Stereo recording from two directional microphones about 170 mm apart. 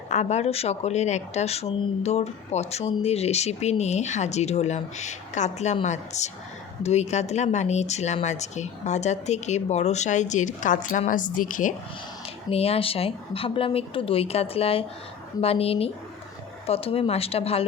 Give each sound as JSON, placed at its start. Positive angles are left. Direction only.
{"t": 0.1, "sound": "speech", "side_deg": 40}
{"t": 12.5, "sound": "speech", "side_deg": 35}